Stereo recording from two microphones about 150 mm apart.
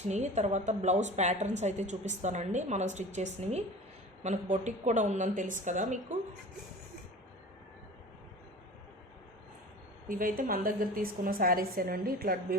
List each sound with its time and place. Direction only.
0.1 s a woman's voice: 50° right (ahead or behind)
10.1 s a woman's voice: 70° right (ahead or behind)